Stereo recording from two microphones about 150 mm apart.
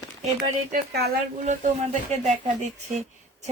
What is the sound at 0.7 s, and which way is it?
Speech, 80° right.